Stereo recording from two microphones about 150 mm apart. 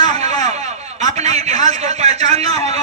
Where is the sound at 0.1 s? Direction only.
45° right (ahead or behind).